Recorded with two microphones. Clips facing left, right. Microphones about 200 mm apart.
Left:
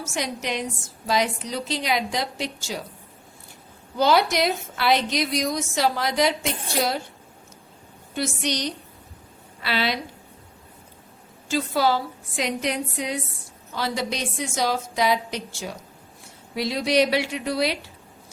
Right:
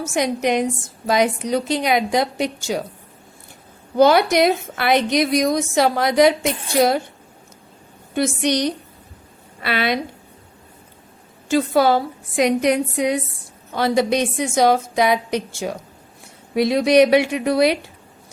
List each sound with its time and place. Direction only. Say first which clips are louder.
1.0 s a woman's voice: right 6 dB; 55° right (ahead or behind)
3.9 s a woman's voice: right 6 dB; 55° right (ahead or behind)
8.1 s a woman's voice: right 7 dB; 55° right (ahead or behind)
11.4 s a woman's voice: right 6 dB; 60° right (ahead or behind)